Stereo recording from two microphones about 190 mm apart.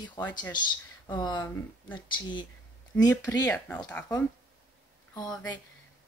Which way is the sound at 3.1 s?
15° left (ahead or behind).